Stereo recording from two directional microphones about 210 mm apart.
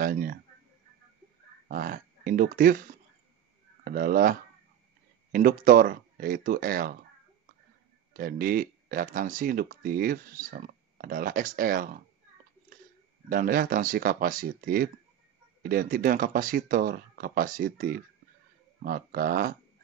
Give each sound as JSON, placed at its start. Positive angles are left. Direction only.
{"t": 0.0, "sound": "speech", "side_deg": -45}
{"t": 1.7, "sound": "speech", "side_deg": -40}
{"t": 8.1, "sound": "speech", "side_deg": -40}
{"t": 13.3, "sound": "speech", "side_deg": -40}